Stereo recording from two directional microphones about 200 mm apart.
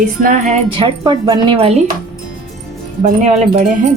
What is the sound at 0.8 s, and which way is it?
Music, 25° right (ahead or behind).